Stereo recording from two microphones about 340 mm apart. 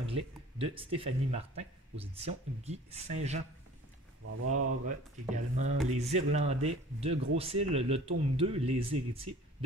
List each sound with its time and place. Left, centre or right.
0.0 s a sound: centre
0.9 s speech: centre
4.2 s speech: right
4.8 s speech: right